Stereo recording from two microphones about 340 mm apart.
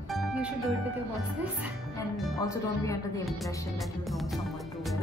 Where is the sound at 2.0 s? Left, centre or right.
Centre.